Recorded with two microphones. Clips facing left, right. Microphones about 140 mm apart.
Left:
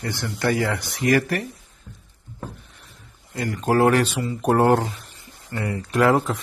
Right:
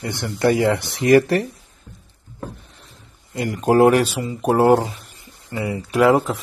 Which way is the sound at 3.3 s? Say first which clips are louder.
Right 4 dB; 15° right (ahead or behind).